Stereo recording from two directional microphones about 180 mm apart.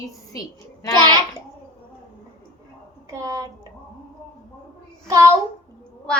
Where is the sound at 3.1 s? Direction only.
20° right (ahead or behind).